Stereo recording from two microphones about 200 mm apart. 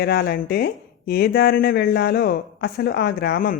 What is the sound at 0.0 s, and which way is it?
Speech, 50° left (ahead or behind).